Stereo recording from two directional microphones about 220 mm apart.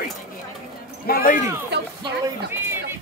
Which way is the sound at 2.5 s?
10° right (ahead or behind).